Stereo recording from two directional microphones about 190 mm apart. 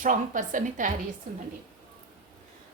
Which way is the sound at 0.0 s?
45° right (ahead or behind).